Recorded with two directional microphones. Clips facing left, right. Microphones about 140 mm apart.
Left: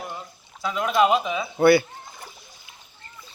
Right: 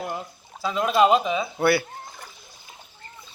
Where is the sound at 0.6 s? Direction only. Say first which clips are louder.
Right 1 dB; 30° right (ahead or behind).